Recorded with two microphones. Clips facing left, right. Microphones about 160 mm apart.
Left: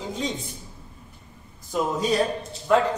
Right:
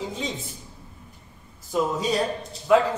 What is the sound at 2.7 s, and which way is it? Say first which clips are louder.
Speech: right 2 dB; 5° right (ahead or behind).